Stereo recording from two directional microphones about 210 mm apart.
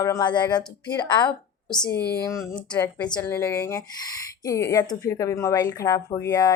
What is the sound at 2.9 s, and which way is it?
Speech, 20° left (ahead or behind).